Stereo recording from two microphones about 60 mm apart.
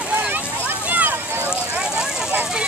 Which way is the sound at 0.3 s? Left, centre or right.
Right.